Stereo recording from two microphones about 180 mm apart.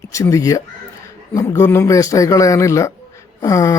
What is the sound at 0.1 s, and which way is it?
Speech, 15° left (ahead or behind).